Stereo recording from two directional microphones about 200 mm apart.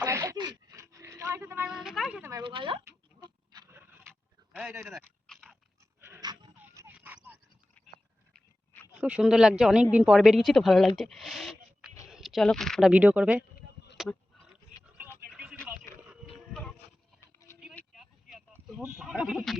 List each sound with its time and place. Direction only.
0.0 s a sound: 15° right (ahead or behind)
2.3 s speech: 25° right (ahead or behind)
2.8 s a sound: 20° right (ahead or behind)
4.5 s speech: 10° right (ahead or behind)
4.9 s dog: centre (ahead or behind)
6.0 s dog: 15° right (ahead or behind)
6.6 s dog: 10° right (ahead or behind)
8.3 s dog: 10° left (ahead or behind)
9.0 s speech: 5° right (ahead or behind)
13.9 s a sound: centre (ahead or behind)
17.7 s vehicle: centre (ahead or behind)
18.9 s speech: 5° right (ahead or behind)